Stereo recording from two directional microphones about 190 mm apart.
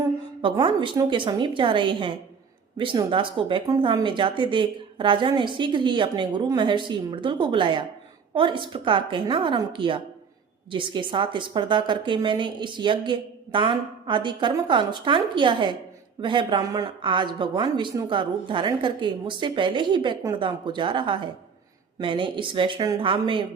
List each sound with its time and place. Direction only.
0.4 s a woman's voice: 25° right (ahead or behind)